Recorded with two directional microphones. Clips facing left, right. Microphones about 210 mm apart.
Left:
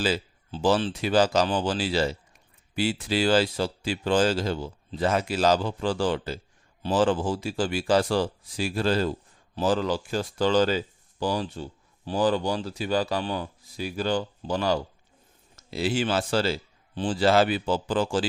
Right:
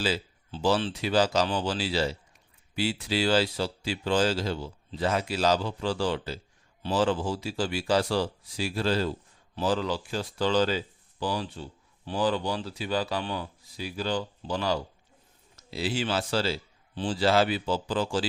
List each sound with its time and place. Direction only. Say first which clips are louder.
0.0 s speech: left 3 dB; 50° left (ahead or behind)